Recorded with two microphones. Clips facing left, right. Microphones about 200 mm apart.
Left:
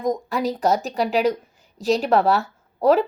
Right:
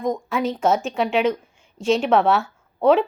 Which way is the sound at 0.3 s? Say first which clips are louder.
Right 3 dB; centre (ahead or behind).